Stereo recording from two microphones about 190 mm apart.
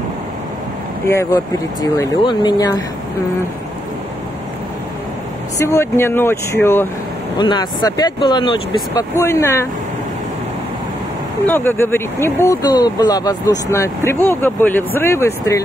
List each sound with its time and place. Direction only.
1.0 s speech: 15° left (ahead or behind)
5.6 s speech: 15° left (ahead or behind)
7.3 s speech: 25° left (ahead or behind)
8.9 s speech: 15° left (ahead or behind)
11.4 s speech: 10° left (ahead or behind)